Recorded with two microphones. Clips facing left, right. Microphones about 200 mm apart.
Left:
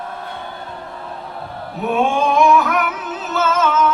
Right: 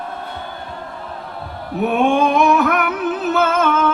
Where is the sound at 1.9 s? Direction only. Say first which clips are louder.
Right 1 dB; 60° right (ahead or behind).